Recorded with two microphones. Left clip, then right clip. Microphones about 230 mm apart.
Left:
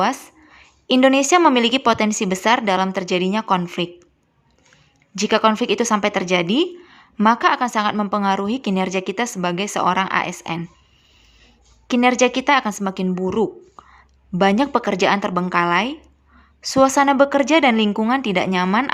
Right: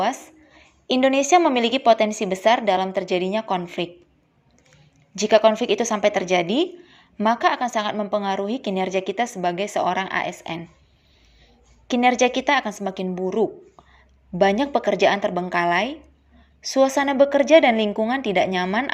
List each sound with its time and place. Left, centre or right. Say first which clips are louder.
0.0 s a sound: left 3 dB; centre
1.1 s a woman's voice: left 3 dB; centre
5.1 s speech: right 1 dB; centre
11.9 s speech: left 2 dB; centre
14.3 s speech: left 2 dB; centre